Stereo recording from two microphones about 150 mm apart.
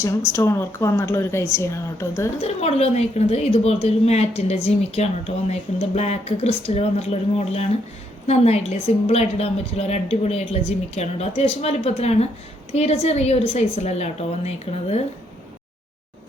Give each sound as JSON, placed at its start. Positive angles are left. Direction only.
{"t": 0.3, "sound": "a woman's voice", "side_deg": 15}
{"t": 2.4, "sound": "a woman's voice", "side_deg": 45}
{"t": 9.0, "sound": "a woman's voice", "side_deg": 45}